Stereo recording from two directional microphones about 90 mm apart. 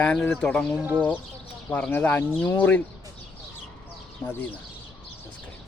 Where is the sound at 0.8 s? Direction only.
20° right (ahead or behind).